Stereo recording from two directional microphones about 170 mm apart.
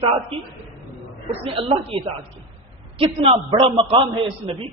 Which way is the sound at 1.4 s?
30° right (ahead or behind).